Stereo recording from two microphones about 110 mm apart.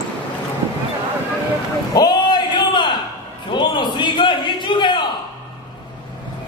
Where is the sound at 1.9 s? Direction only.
40° left (ahead or behind).